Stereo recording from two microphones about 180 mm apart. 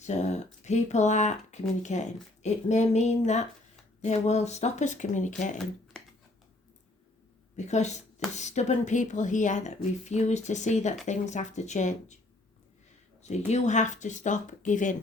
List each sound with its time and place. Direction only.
0.0 s a woman's voice: 40° left (ahead or behind)
7.5 s a woman's voice: 40° left (ahead or behind)
13.2 s speech: 40° left (ahead or behind)